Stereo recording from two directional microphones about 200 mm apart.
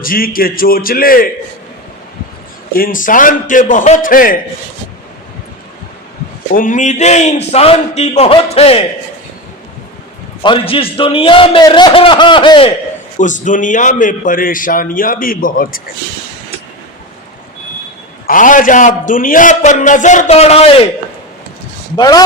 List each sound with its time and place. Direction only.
0.0 s a man's voice: 45° left (ahead or behind)
2.7 s a man's voice: 45° left (ahead or behind)
6.5 s a man's voice: 40° left (ahead or behind)
10.4 s a man's voice: 25° left (ahead or behind)
13.1 s a man's voice: 40° left (ahead or behind)
18.3 s a man's voice: 40° left (ahead or behind)
21.9 s a man's voice: 20° left (ahead or behind)